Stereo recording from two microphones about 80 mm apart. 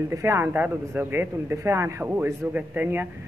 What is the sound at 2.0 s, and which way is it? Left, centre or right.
Speech, right.